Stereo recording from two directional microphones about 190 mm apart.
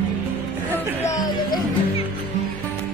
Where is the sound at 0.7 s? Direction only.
15° left (ahead or behind).